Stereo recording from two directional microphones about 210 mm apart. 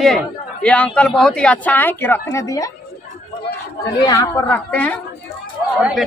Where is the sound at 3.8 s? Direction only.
15° left (ahead or behind).